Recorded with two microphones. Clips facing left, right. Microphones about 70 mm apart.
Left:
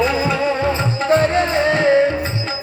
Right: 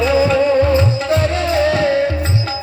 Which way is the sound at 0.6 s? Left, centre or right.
Left.